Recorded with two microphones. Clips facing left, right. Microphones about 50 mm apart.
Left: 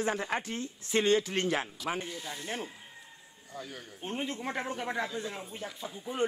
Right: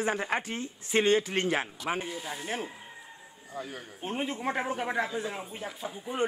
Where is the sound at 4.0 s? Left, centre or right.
Centre.